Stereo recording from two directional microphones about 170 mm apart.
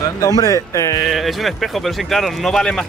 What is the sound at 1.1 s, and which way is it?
Speech, centre (ahead or behind).